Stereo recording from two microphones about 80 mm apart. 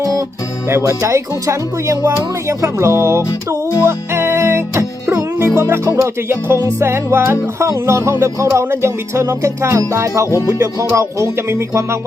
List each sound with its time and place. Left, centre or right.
0.0 s music: right
10.2 s music: left
10.6 s music: right